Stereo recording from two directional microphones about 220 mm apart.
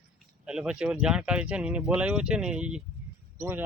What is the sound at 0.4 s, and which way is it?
Speech, 5° right (ahead or behind).